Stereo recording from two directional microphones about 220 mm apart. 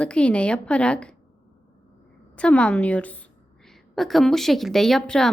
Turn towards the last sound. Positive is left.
turn(degrees=0)  # may be behind; listen again after turning